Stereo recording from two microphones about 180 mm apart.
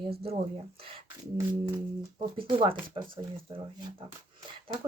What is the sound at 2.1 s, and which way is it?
Speech, 30° right (ahead or behind).